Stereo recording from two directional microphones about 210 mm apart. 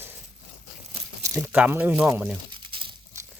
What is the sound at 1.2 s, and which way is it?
Speech, 10° right (ahead or behind).